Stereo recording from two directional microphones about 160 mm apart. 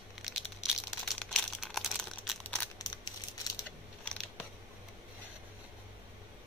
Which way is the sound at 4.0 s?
5° left (ahead or behind).